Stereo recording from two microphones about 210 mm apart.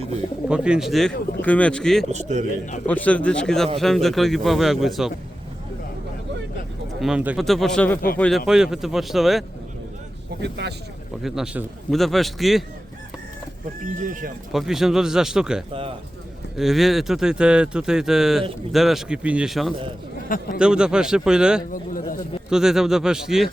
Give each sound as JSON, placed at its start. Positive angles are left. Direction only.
{"t": 0.4, "sound": "speech", "side_deg": -5}
{"t": 2.0, "sound": "speech", "side_deg": -35}
{"t": 2.8, "sound": "speech", "side_deg": 5}
{"t": 7.0, "sound": "speech", "side_deg": -5}
{"t": 10.4, "sound": "speech", "side_deg": -55}
{"t": 11.2, "sound": "speech", "side_deg": 0}
{"t": 14.0, "sound": "speech", "side_deg": -40}
{"t": 14.5, "sound": "speech", "side_deg": 0}
{"t": 15.7, "sound": "speech", "side_deg": -25}
{"t": 16.6, "sound": "speech", "side_deg": 0}
{"t": 20.2, "sound": "a man's voice", "side_deg": 40}
{"t": 20.6, "sound": "speech", "side_deg": -5}
{"t": 21.7, "sound": "a sound", "side_deg": 40}
{"t": 22.4, "sound": "speech", "side_deg": 0}